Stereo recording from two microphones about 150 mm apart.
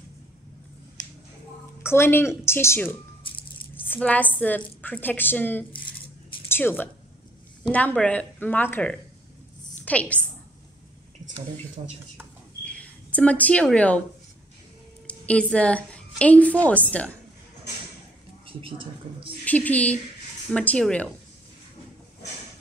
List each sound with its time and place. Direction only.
1.8 s a woman's voice: 15° left (ahead or behind)
3.3 s music: 35° left (ahead or behind)
3.7 s a woman's voice: 10° left (ahead or behind)
11.8 s speech: 45° right (ahead or behind)
12.6 s speech: 10° left (ahead or behind)
15.0 s a woman's voice: 10° left (ahead or behind)
18.6 s a woman's voice: 35° right (ahead or behind)
19.4 s a woman's voice: 10° left (ahead or behind)